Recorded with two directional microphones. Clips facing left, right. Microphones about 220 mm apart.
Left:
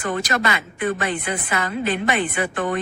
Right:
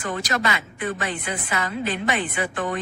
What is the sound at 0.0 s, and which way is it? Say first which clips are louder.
A man's voice: left 3 dB; 55° left (ahead or behind).